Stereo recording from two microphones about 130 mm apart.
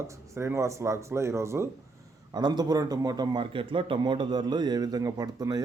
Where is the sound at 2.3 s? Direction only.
30° right (ahead or behind).